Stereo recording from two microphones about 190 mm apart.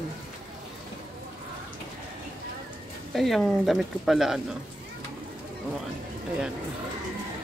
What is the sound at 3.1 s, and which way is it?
Speech, centre (ahead or behind).